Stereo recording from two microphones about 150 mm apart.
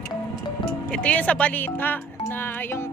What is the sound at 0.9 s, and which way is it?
Speech, 10° left (ahead or behind).